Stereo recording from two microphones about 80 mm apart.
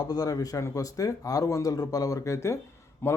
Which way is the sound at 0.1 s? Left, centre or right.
Left.